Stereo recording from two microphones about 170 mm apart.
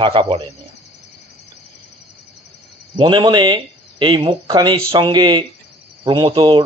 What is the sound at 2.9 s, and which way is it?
Speech, 25° right (ahead or behind).